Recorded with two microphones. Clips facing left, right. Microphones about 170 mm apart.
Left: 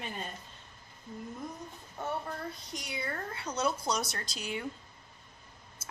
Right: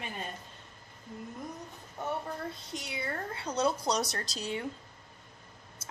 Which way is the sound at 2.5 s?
25° right (ahead or behind).